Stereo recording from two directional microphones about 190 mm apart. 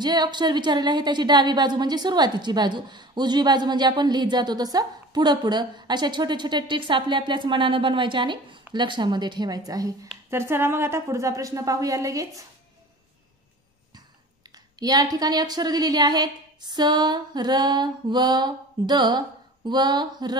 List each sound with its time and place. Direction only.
0.0 s a woman's voice: 20° right (ahead or behind)
14.5 s a woman's voice: 20° right (ahead or behind)